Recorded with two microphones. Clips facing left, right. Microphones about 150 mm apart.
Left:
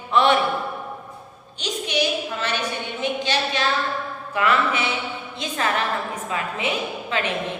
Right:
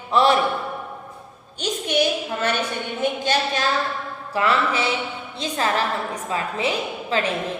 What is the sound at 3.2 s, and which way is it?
Speech, 45° right (ahead or behind).